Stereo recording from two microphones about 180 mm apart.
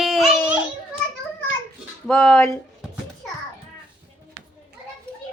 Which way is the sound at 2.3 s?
15° left (ahead or behind).